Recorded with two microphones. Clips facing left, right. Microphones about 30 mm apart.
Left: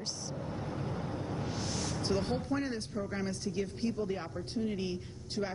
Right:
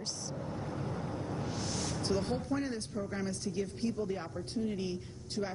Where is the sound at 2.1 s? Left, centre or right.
Left.